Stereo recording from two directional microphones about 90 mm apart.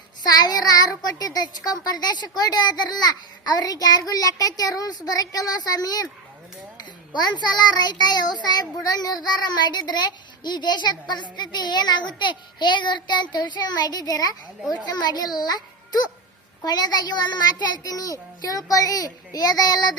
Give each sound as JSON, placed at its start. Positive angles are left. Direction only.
{"t": 0.2, "sound": "a child's voice", "side_deg": 45}
{"t": 17.8, "sound": "a child's voice", "side_deg": 45}